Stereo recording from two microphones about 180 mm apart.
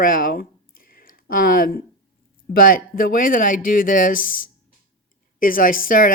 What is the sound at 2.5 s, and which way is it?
Speech, 50° left (ahead or behind).